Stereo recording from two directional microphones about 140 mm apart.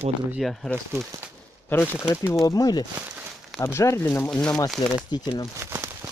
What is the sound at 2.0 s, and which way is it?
Speech, 20° left (ahead or behind).